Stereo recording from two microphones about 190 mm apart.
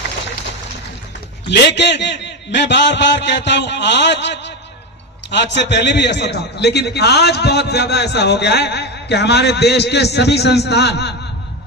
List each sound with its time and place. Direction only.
1.5 s a man's voice: 65° left (ahead or behind)